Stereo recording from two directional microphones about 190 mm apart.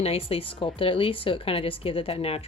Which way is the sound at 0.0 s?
30° left (ahead or behind).